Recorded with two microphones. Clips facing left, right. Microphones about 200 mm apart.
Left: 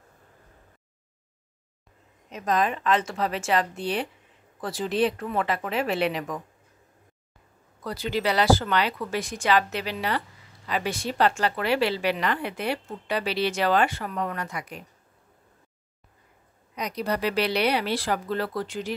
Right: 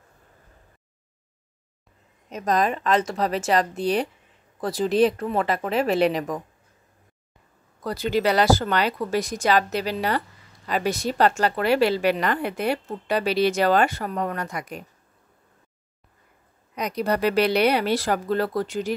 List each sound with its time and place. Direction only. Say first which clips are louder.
2.3 s speech: right 2 dB; 40° right (ahead or behind)
7.8 s a woman's voice: right 4 dB; 45° right (ahead or behind)
16.7 s a woman's voice: right 4 dB; 50° right (ahead or behind)